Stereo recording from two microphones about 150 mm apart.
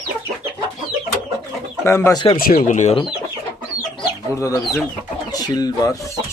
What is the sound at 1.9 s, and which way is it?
Speech, 20° left (ahead or behind).